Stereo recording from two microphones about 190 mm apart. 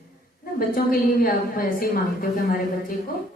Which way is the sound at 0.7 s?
50° left (ahead or behind).